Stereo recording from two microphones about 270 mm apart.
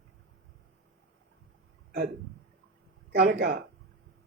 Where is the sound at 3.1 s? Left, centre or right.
Right.